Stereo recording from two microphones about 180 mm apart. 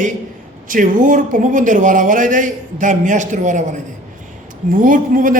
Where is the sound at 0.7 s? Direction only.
45° right (ahead or behind).